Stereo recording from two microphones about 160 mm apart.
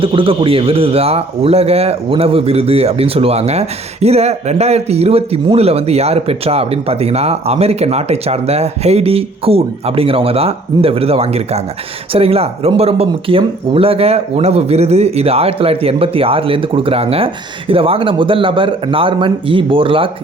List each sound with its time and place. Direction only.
0.0 s a man's voice: 35° right (ahead or behind)